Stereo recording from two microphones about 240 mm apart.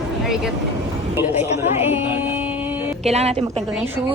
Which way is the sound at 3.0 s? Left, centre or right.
Right.